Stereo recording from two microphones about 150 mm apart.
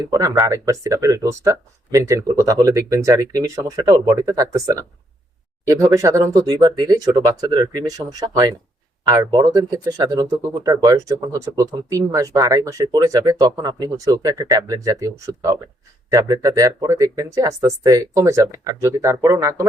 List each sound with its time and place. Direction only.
0.1 s speech: 25° right (ahead or behind)